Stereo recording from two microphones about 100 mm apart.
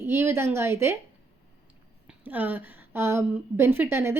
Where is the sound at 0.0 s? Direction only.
25° right (ahead or behind).